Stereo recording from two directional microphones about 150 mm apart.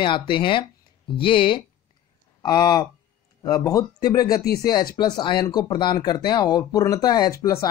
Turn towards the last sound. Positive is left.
turn(degrees=20)  # may be behind; listen again after turning